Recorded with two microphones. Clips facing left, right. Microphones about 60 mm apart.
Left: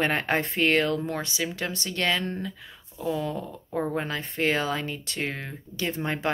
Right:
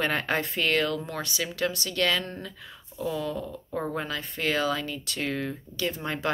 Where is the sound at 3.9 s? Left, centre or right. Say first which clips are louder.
Left 3 dB; left.